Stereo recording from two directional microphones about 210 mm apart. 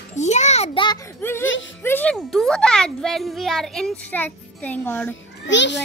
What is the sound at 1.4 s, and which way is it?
Speech, 65° left (ahead or behind).